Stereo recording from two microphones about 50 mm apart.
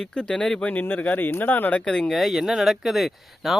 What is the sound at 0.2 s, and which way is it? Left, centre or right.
Speech, centre.